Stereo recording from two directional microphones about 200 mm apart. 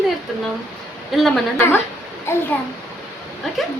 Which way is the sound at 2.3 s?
15° left (ahead or behind).